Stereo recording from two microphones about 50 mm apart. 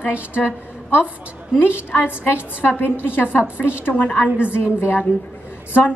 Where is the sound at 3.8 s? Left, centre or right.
Left.